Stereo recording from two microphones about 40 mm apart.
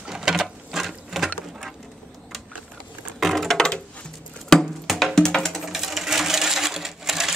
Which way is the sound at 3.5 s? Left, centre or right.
Centre.